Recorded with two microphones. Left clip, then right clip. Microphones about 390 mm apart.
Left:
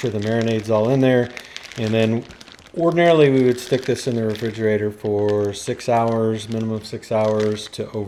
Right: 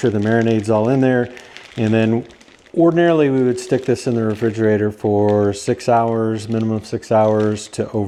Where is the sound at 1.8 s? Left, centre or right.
Right.